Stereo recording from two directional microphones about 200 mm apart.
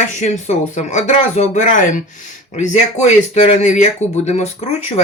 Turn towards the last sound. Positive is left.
turn(degrees=35)  # may be behind; listen again after turning